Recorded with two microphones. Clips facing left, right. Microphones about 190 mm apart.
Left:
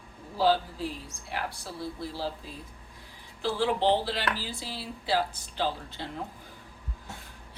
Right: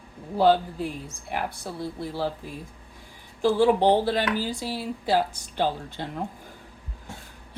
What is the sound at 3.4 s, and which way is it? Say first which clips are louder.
A woman's voice: right 7 dB; 45° right (ahead or behind).